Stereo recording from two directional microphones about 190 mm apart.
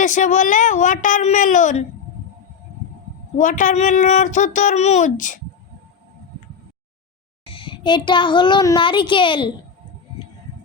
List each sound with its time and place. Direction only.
0.0 s speech: 40° left (ahead or behind)
3.3 s speech: 40° left (ahead or behind)
7.5 s a child's voice: 25° left (ahead or behind)